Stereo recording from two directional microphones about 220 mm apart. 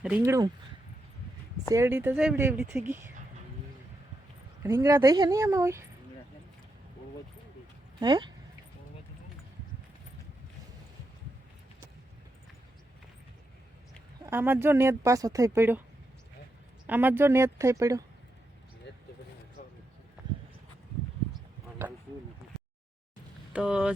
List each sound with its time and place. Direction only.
0.2 s speech: 15° right (ahead or behind)
1.7 s speech: 10° right (ahead or behind)
4.6 s speech: 10° right (ahead or behind)
7.9 s speech: 20° right (ahead or behind)
14.3 s speech: 10° right (ahead or behind)
16.8 s speech: 10° right (ahead or behind)
18.9 s vehicle: 50° left (ahead or behind)
19.6 s basketball bounce: 35° left (ahead or behind)
21.3 s a sound: 10° right (ahead or behind)
23.5 s speech: 5° right (ahead or behind)